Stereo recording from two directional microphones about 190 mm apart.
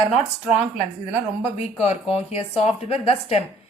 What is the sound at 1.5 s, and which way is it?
Speech, 35° left (ahead or behind).